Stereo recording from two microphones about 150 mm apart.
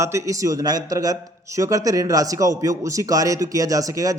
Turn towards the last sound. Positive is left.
turn(degrees=-25)  # may be behind; listen again after turning